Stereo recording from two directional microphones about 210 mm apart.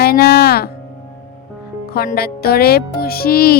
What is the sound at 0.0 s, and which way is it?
Speech, 50° left (ahead or behind).